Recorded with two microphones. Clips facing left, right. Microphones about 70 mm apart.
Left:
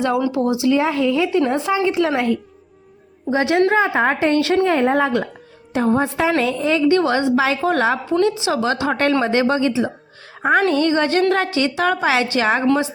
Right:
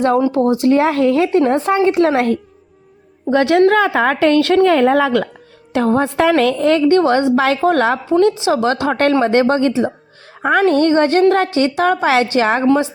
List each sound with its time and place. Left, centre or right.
0.2 s a woman's voice: right
3.7 s a woman's voice: right
4.4 s a woman's voice: right
4.6 s speech: right
5.7 s a woman's voice: right
8.2 s a woman's voice: right